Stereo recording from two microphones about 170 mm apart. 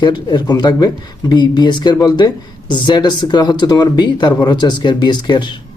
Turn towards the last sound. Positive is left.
turn(degrees=25)  # may be behind; listen again after turning